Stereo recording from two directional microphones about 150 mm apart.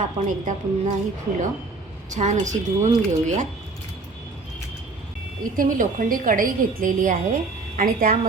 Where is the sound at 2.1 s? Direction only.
55° right (ahead or behind).